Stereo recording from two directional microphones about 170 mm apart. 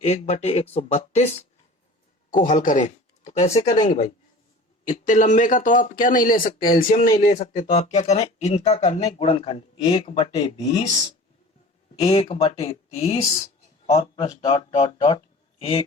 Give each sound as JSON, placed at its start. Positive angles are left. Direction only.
{"t": 0.0, "sound": "speech", "side_deg": 40}
{"t": 2.3, "sound": "speech", "side_deg": 50}
{"t": 4.9, "sound": "speech", "side_deg": 50}
{"t": 7.1, "sound": "speech", "side_deg": 40}
{"t": 11.9, "sound": "speech", "side_deg": 30}